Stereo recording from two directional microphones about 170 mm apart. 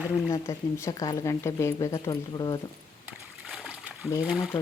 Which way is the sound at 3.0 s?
5° right (ahead or behind).